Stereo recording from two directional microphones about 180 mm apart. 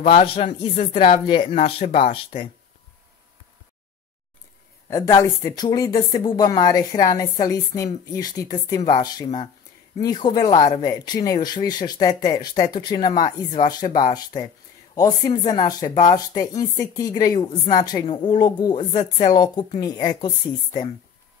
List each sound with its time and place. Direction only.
0.0 s speech: 30° left (ahead or behind)
4.8 s speech: 20° left (ahead or behind)